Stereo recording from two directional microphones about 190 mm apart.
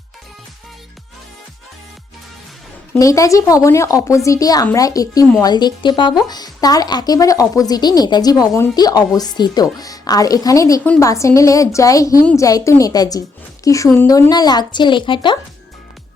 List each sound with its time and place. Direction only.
2.9 s a woman's voice: 15° left (ahead or behind)
12.2 s speech: 5° left (ahead or behind)
12.5 s a woman's voice: 15° left (ahead or behind)